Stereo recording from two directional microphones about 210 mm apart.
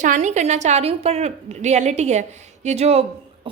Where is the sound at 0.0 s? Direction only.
35° right (ahead or behind).